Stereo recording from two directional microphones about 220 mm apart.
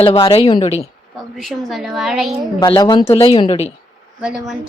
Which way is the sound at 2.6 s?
20° left (ahead or behind).